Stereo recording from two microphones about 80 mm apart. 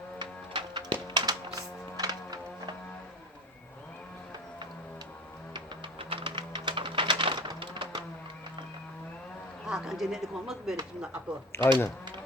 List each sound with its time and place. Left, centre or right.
0.2 s music: right
1.0 s music: right
5.5 s music: right
9.6 s speech: centre
11.5 s speech: left